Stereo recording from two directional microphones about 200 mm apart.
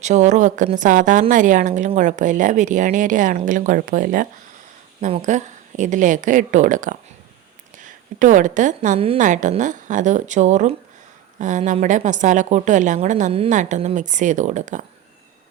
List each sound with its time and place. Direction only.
0.0 s a woman's voice: 35° right (ahead or behind)